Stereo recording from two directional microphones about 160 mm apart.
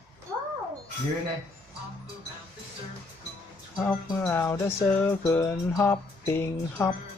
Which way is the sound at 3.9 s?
10° left (ahead or behind).